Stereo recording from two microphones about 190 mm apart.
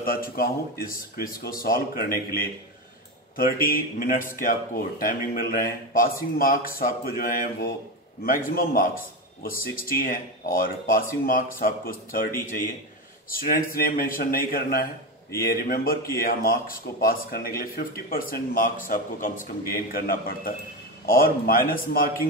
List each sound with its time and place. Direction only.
0.0 s speech: 50° left (ahead or behind)